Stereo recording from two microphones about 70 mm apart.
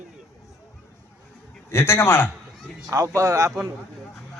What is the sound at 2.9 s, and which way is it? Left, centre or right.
Speech, right.